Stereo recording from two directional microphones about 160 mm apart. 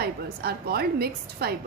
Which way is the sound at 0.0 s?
80° right.